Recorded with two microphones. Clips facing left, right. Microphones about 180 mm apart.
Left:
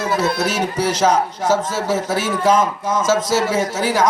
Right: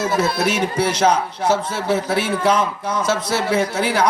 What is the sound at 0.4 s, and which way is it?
A man's voice, 40° left (ahead or behind).